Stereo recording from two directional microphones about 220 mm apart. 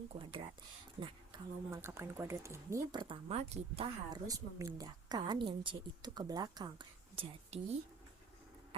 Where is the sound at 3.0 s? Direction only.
25° right (ahead or behind).